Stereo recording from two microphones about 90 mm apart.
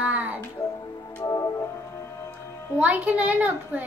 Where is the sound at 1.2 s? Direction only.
40° left (ahead or behind).